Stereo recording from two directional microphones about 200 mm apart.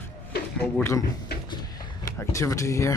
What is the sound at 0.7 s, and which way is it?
Speech, 15° left (ahead or behind).